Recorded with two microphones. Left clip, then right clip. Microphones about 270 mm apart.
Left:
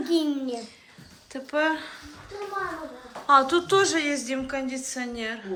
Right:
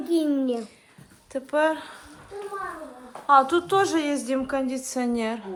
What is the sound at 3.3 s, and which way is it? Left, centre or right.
A woman's voice, centre.